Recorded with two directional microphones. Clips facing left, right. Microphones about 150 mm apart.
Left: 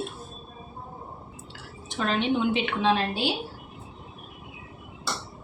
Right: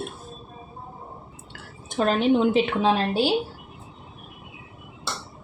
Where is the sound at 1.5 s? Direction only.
50° right (ahead or behind).